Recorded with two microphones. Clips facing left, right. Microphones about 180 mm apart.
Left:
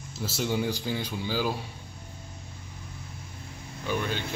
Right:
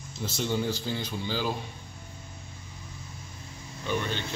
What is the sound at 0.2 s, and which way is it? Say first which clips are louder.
Speech: left 1 dB; 10° left (ahead or behind).